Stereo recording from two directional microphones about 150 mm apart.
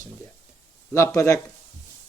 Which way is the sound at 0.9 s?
20° left (ahead or behind).